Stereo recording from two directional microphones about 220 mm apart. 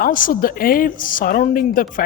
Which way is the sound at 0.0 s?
40° left (ahead or behind).